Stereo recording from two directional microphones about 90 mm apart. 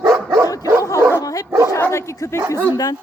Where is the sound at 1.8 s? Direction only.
30° left (ahead or behind).